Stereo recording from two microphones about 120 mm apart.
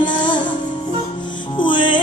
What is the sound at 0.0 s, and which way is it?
Music, 40° left (ahead or behind).